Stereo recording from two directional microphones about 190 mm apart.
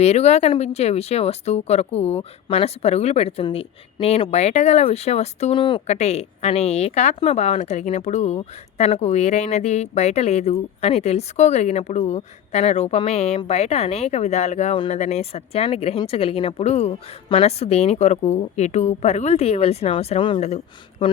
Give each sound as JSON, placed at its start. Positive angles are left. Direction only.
{"t": 0.0, "sound": "speech", "side_deg": 35}